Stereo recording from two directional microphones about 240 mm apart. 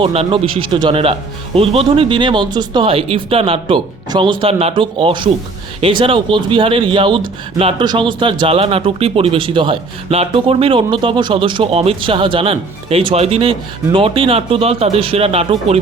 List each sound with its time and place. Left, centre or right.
0.0 s speech: right